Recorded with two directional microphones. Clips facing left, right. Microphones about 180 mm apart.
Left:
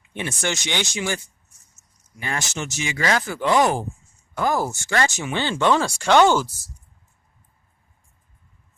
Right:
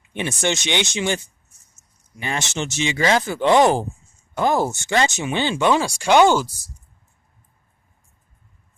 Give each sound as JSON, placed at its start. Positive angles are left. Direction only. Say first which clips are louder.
{"t": 0.1, "sound": "speech", "louder": "right 4 dB", "side_deg": -20}